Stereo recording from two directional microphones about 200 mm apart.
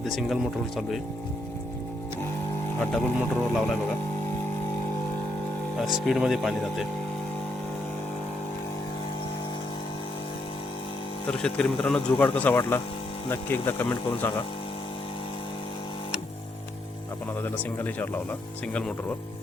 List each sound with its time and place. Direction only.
0.0 s speech: centre (ahead or behind)
3.2 s speech: centre (ahead or behind)
5.7 s speech: centre (ahead or behind)
11.3 s speech: 5° left (ahead or behind)
17.4 s speech: 10° left (ahead or behind)